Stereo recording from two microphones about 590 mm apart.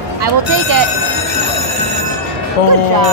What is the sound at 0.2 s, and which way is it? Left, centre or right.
Speech, right.